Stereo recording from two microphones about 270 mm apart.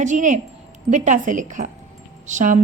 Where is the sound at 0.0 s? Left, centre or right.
Right.